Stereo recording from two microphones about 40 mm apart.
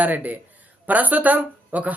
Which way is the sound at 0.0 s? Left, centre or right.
Right.